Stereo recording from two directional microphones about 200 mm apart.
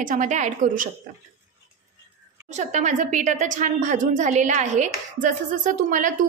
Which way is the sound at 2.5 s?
35° right (ahead or behind).